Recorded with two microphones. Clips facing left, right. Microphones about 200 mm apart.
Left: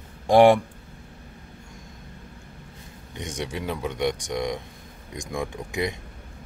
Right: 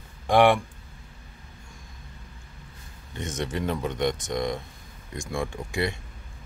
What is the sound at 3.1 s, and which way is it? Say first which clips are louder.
Speech: right 1 dB; 15° left (ahead or behind).